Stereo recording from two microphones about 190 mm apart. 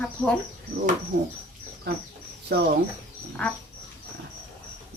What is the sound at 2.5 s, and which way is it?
Speech, 60° right (ahead or behind).